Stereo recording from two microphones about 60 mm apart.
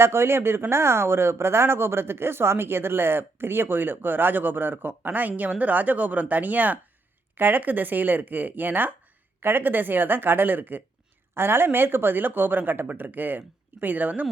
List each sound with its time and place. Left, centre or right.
0.0 s speech: right